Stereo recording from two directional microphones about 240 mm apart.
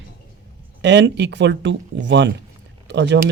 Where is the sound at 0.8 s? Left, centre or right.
Right.